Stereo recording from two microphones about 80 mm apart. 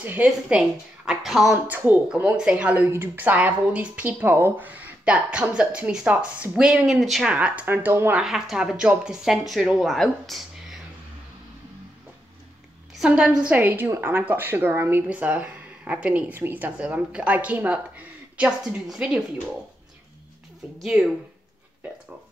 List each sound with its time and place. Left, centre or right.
0.0 s speech: centre
2.5 s speech: centre
7.2 s speech: centre
8.2 s speech: centre
13.0 s speech: centre
13.6 s speech: right
15.0 s speech: centre
16.8 s speech: centre
20.8 s speech: centre